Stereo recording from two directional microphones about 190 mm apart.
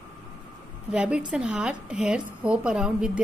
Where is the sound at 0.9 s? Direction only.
5° right (ahead or behind).